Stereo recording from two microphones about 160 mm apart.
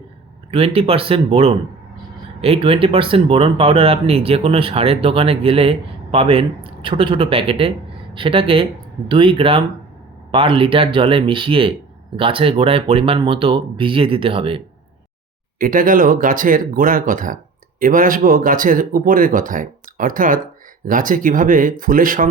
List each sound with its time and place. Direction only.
0.5 s speech: 35° right (ahead or behind)
15.5 s speech: 60° right (ahead or behind)